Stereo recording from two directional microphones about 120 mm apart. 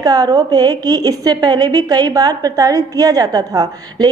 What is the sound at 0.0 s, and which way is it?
A woman's voice, 30° right (ahead or behind).